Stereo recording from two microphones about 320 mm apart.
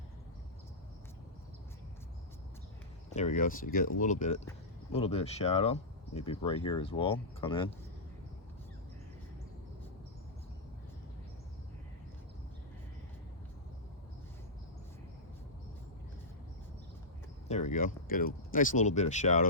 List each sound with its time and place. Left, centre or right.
3.2 s speech: left
17.5 s speech: left